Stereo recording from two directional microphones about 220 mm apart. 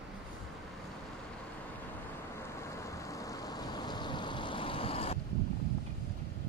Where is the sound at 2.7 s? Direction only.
15° left (ahead or behind).